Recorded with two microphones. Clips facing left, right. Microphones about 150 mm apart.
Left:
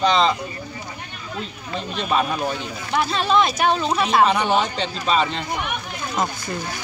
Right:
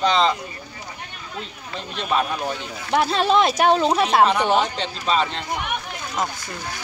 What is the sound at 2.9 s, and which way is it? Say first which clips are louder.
Speech: right 2 dB; 70° right (ahead or behind).